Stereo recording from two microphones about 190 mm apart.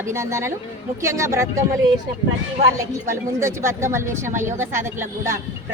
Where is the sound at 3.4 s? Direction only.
15° right (ahead or behind).